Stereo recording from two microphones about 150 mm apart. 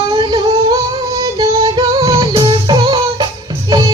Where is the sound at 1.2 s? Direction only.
30° right (ahead or behind).